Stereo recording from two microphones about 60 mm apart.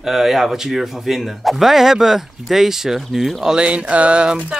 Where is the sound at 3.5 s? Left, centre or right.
Centre.